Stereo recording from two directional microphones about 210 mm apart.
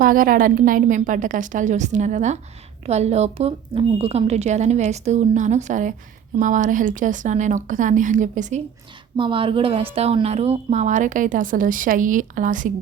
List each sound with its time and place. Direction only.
0.0 s a woman's voice: 40° right (ahead or behind)
9.1 s a woman's voice: 25° right (ahead or behind)